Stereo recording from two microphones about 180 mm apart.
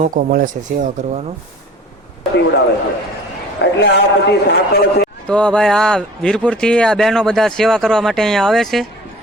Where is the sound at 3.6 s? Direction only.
70° left (ahead or behind).